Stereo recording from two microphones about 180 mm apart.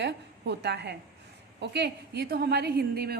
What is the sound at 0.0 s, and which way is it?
A woman's voice, 75° right (ahead or behind).